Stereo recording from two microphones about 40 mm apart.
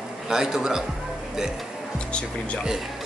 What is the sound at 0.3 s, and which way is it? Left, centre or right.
Speech, centre.